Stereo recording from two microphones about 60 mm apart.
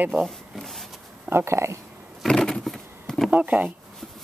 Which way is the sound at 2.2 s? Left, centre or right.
Centre.